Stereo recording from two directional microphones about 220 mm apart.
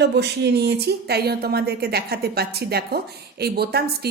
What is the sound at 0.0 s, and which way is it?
Speech, 50° right (ahead or behind).